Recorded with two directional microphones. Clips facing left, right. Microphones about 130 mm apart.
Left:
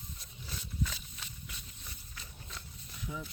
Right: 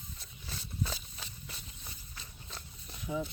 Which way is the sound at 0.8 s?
30° right (ahead or behind).